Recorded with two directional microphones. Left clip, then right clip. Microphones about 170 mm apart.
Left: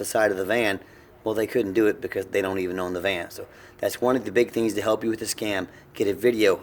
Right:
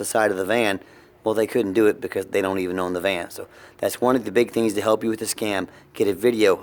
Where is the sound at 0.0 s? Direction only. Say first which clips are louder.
Right 2 dB; 50° right (ahead or behind).